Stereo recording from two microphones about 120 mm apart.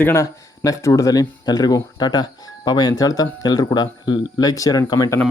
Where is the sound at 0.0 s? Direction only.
25° left (ahead or behind).